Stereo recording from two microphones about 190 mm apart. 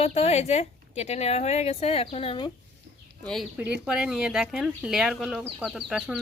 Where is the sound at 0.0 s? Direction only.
35° left (ahead or behind).